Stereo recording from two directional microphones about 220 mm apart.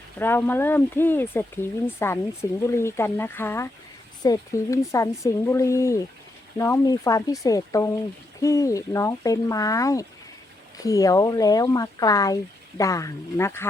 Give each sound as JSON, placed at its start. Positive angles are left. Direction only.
{"t": 0.2, "sound": "speech", "side_deg": 10}